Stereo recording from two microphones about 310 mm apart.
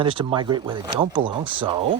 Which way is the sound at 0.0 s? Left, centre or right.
Centre.